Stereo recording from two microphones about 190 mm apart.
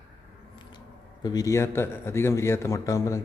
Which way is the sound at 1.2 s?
20° left (ahead or behind).